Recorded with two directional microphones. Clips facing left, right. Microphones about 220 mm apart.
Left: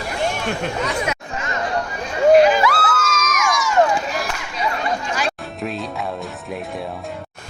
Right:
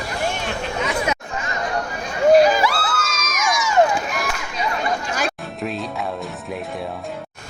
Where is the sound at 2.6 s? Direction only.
30° right (ahead or behind).